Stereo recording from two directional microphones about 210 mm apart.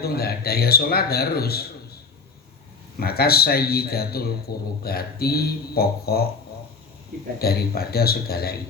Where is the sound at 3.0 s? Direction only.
45° left (ahead or behind).